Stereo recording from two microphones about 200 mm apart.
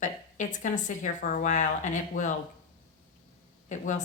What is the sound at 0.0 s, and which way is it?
A woman's voice, 40° left (ahead or behind).